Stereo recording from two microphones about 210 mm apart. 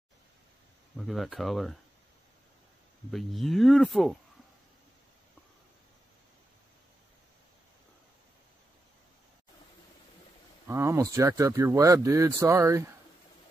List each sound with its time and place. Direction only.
0.9 s speech: centre (ahead or behind)
3.1 s speech: centre (ahead or behind)
10.7 s speech: 15° right (ahead or behind)